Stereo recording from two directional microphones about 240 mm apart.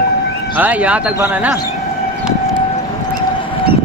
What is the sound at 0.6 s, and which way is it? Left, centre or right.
Speech, centre.